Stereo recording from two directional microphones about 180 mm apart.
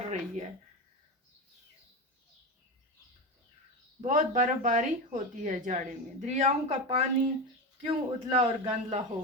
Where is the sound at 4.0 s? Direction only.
45° right (ahead or behind).